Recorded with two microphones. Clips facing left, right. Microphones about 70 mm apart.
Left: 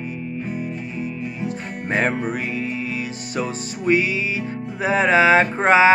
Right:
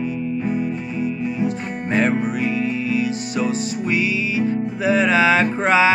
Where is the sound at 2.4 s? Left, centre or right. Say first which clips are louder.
Right 4 dB; left.